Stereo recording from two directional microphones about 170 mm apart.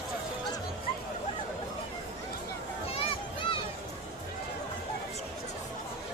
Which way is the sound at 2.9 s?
35° left (ahead or behind).